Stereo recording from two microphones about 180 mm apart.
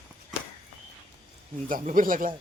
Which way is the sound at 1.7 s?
50° right (ahead or behind).